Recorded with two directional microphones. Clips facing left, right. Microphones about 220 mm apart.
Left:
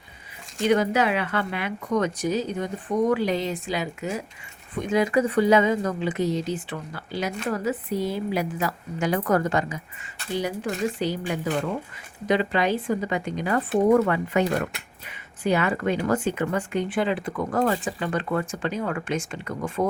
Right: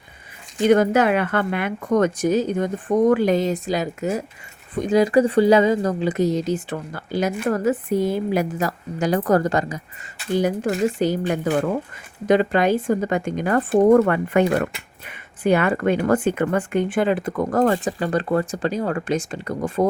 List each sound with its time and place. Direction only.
0.6 s speech: 50° right (ahead or behind)